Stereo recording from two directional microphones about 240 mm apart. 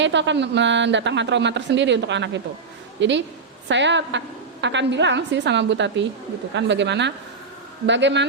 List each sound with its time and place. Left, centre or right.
0.0 s speech: right